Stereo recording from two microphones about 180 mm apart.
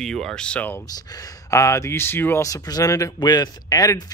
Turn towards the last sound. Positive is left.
turn(degrees=20)  # may be behind; listen again after turning